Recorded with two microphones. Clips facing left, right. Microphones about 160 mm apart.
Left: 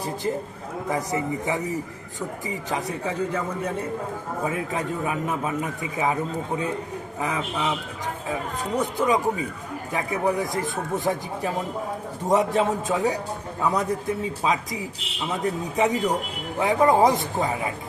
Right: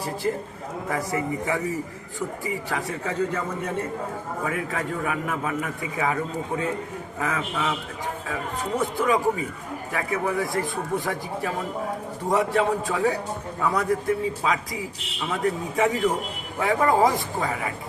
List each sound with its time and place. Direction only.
0.0 s a man's voice: 20° left (ahead or behind)
4.4 s a man's voice: 20° left (ahead or behind)
7.2 s a man's voice: 20° left (ahead or behind)
8.8 s a man's voice: 20° left (ahead or behind)